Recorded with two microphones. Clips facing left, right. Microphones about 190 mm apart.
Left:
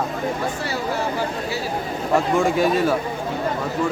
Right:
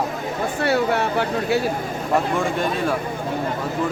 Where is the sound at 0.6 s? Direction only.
65° right (ahead or behind).